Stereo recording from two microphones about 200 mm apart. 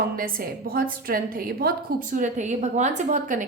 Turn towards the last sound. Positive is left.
turn(degrees=-40)  # may be behind; listen again after turning